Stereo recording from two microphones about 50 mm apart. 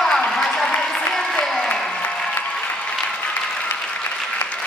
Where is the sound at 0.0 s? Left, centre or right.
Centre.